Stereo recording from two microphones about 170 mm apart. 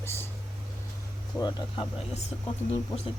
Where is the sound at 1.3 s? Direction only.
10° left (ahead or behind).